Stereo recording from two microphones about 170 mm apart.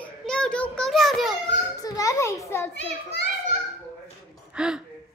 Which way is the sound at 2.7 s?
90° left.